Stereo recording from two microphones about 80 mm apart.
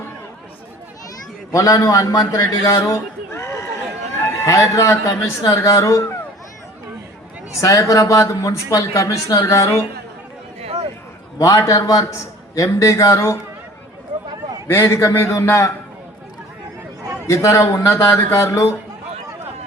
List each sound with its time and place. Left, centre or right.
1.5 s a man's voice: left
7.6 s speech: left
11.3 s speech: left
14.7 s a man's voice: left
17.2 s a man's voice: left